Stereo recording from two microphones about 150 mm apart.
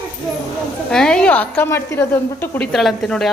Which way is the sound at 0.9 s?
5° left (ahead or behind).